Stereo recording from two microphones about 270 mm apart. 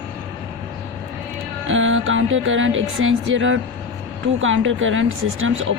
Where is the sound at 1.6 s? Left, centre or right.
Right.